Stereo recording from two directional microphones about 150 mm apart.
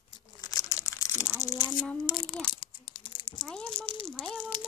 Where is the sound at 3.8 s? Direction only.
35° left (ahead or behind).